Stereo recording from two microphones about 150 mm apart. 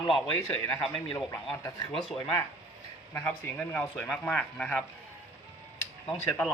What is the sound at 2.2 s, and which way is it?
Speech, 30° left (ahead or behind).